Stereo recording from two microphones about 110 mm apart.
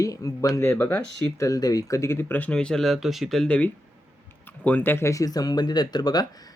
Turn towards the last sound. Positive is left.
turn(degrees=35)  # may be behind; listen again after turning